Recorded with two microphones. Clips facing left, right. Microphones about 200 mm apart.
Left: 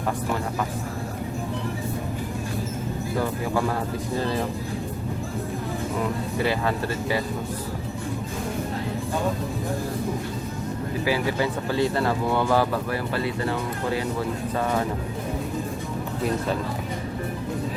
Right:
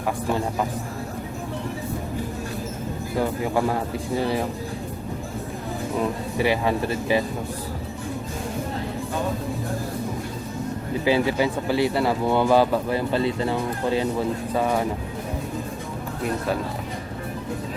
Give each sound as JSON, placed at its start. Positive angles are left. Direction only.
{"t": 3.2, "sound": "speech", "side_deg": -20}
{"t": 6.4, "sound": "speech", "side_deg": -15}
{"t": 11.0, "sound": "speech", "side_deg": -20}